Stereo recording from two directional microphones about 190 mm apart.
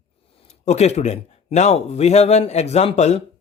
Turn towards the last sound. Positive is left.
turn(degrees=35)  # may be behind; listen again after turning